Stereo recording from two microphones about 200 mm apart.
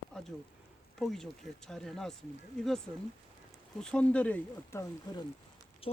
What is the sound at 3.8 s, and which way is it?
Speech, 5° left (ahead or behind).